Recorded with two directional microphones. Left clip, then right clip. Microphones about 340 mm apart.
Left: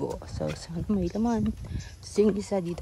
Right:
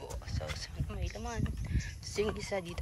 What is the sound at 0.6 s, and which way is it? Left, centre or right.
Speech, centre.